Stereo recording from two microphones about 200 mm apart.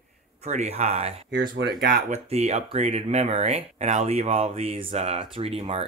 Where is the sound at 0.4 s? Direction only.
35° right (ahead or behind).